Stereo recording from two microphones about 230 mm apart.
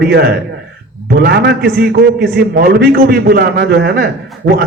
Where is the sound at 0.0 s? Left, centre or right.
Right.